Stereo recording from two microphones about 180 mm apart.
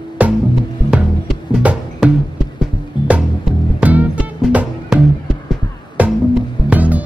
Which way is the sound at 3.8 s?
10° right (ahead or behind).